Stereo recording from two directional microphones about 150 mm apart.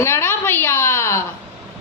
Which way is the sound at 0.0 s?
15° left (ahead or behind).